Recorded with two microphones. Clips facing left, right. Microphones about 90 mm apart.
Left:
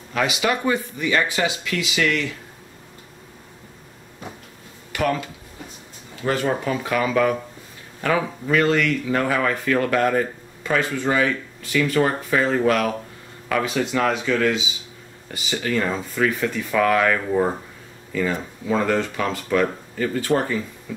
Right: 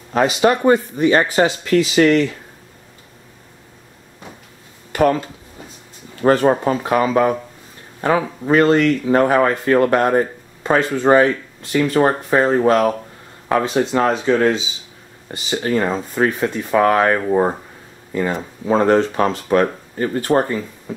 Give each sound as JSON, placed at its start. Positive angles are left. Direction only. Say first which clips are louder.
{"t": 0.1, "sound": "speech", "louder": "right 7 dB", "side_deg": -40}
{"t": 4.9, "sound": "speech", "louder": "right 7 dB", "side_deg": -35}
{"t": 6.2, "sound": "speech", "louder": "right 8 dB", "side_deg": -45}
{"t": 18.7, "sound": "speech", "louder": "right 7 dB", "side_deg": -35}